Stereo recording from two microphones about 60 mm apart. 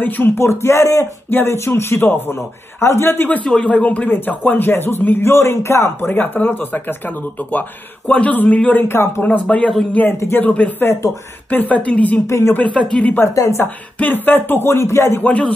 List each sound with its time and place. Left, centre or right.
0.0 s speech: left
1.3 s a man's voice: left
3.4 s speech: centre
3.7 s a man's voice: left
6.1 s a man's voice: left
8.1 s a man's voice: left
8.8 s a man's voice: left
9.2 s a man's voice: left
12.3 s speech: left
12.5 s a man's voice: left
13.3 s a woman's voice: left
13.9 s a man's voice: left
15.2 s a man's voice: left